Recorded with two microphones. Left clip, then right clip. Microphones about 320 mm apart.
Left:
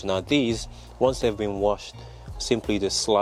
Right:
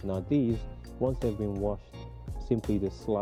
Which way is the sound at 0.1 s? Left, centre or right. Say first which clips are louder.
Left 6 dB; centre.